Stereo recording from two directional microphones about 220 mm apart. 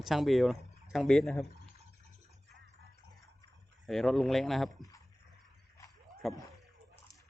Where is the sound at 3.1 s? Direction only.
15° left (ahead or behind).